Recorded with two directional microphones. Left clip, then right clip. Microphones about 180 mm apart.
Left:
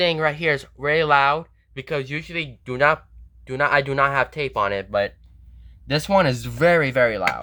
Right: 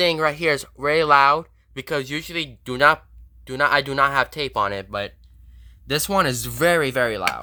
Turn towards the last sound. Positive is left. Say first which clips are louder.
# left 2 dB
turn(degrees=-20)  # may be behind; listen again after turning